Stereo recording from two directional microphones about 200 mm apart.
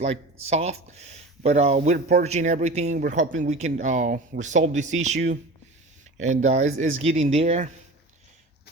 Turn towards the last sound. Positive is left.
turn(degrees=-30)  # may be behind; listen again after turning